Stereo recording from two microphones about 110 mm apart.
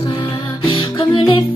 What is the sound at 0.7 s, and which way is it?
Music, 50° left (ahead or behind).